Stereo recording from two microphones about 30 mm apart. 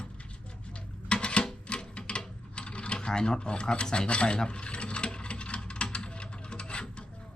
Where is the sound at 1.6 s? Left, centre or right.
Left.